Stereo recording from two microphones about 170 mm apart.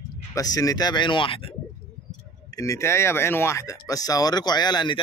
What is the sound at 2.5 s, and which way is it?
Speech, 20° left (ahead or behind).